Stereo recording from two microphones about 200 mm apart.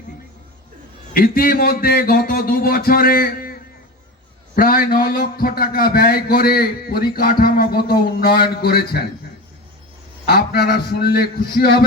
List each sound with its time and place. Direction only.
1.1 s a man's voice: 45° left (ahead or behind)
10.2 s a man's voice: 50° left (ahead or behind)